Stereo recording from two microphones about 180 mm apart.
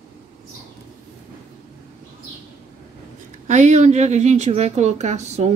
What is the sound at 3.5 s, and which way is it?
Speech, 40° right (ahead or behind).